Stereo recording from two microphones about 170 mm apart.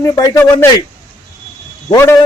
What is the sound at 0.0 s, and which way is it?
Speech, 20° left (ahead or behind).